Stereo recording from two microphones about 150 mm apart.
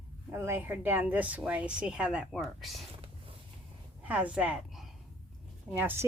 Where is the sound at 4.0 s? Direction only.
10° right (ahead or behind).